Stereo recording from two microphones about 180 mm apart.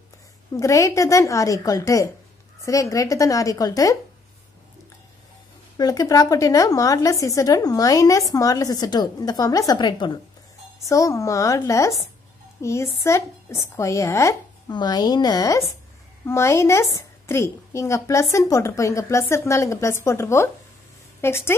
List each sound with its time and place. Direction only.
0.6 s a woman's voice: 15° left (ahead or behind)
5.8 s a woman's voice: 20° left (ahead or behind)